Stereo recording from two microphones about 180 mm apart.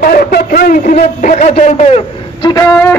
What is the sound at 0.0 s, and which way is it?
A man's voice, 55° left (ahead or behind).